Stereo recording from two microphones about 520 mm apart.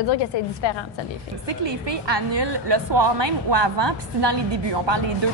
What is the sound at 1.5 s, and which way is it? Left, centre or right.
A woman's voice, right.